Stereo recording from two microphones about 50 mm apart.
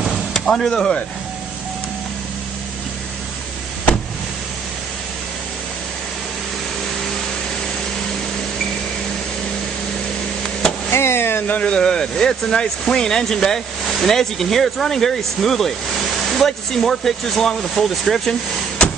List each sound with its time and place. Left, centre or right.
0.3 s speech: centre
10.9 s vehicle: left
11.6 s speech: centre